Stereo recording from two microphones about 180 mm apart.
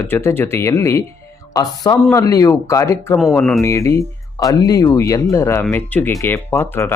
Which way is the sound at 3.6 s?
15° left (ahead or behind).